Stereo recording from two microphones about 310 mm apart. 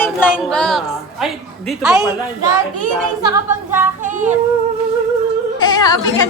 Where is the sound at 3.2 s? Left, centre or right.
Centre.